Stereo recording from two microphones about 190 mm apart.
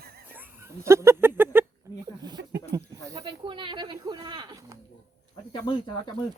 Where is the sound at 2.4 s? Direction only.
65° right (ahead or behind).